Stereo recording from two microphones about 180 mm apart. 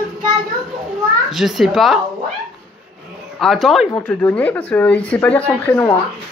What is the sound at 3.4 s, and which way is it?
Speech, centre (ahead or behind).